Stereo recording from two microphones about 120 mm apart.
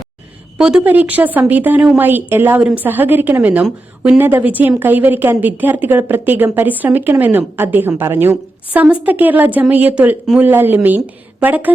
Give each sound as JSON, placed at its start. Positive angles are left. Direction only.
{"t": 0.9, "sound": "a woman's voice", "side_deg": -15}